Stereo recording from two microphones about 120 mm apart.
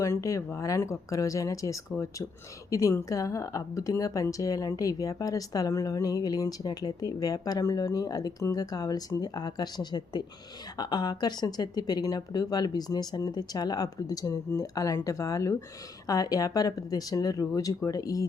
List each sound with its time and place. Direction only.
0.0 s a woman's voice: 25° left (ahead or behind)